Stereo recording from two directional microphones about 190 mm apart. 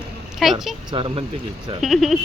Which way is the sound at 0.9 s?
30° right (ahead or behind).